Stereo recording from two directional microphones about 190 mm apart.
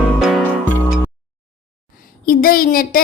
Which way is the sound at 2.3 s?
50° left (ahead or behind).